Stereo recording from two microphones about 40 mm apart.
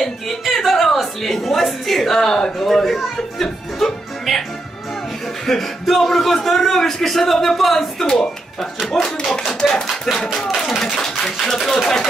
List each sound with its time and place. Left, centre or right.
0.0 s music: centre
1.2 s a woman's voice: centre
2.7 s speech: centre
5.5 s a man's voice: centre
8.9 s a woman's voice: centre
11.3 s a man's voice: centre
11.6 s a woman's voice: centre